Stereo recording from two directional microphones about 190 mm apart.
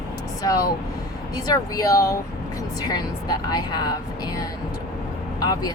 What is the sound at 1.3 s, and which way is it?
Speech, 20° left (ahead or behind).